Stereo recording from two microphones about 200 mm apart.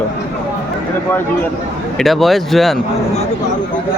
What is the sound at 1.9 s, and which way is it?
Speech, centre (ahead or behind).